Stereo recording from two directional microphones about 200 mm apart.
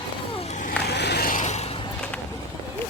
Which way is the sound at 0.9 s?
55° left (ahead or behind).